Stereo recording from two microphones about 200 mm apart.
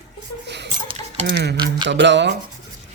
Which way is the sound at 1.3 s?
55° right (ahead or behind).